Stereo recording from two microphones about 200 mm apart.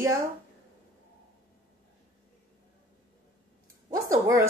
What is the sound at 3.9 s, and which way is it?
Speech, 15° right (ahead or behind).